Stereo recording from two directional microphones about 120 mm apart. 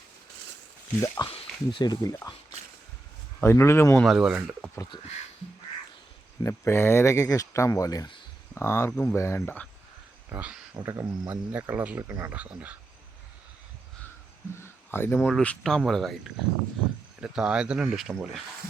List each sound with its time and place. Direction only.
1.0 s speech: 25° left (ahead or behind)
3.4 s speech: 20° left (ahead or behind)
3.9 s speech: centre (ahead or behind)
6.4 s speech: 25° left (ahead or behind)
10.2 s speech: 10° right (ahead or behind)
14.5 s a sound: 20° left (ahead or behind)
15.4 s speech: 5° left (ahead or behind)
17.2 s speech: 5° right (ahead or behind)